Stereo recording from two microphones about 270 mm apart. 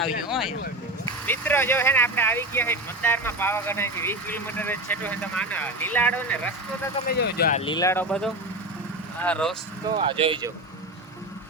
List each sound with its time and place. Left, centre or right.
0.0 s speech: centre
7.1 s speech: left
7.6 s speech: centre
9.8 s speech: centre